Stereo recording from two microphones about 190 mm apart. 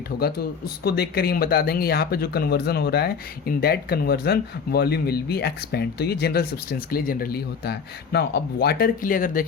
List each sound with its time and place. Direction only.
0.9 s speech: 55° left (ahead or behind)